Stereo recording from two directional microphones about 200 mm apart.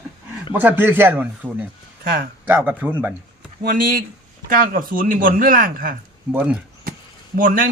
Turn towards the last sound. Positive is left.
turn(degrees=-45)  # may be behind; listen again after turning